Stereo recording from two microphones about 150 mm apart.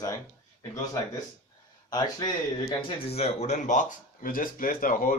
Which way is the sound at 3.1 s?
45° left (ahead or behind).